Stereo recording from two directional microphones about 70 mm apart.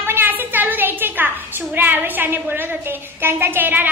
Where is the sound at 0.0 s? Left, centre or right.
Right.